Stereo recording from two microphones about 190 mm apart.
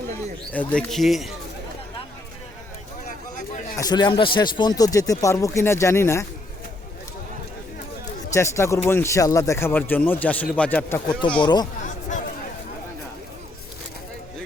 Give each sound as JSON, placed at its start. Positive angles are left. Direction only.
{"t": 0.5, "sound": "speech", "side_deg": 5}
{"t": 3.8, "sound": "speech", "side_deg": 20}
{"t": 8.3, "sound": "speech", "side_deg": 15}
{"t": 11.3, "sound": "speech", "side_deg": 20}